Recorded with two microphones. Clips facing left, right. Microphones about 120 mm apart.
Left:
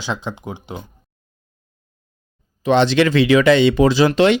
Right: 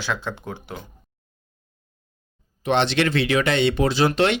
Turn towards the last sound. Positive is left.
turn(degrees=90)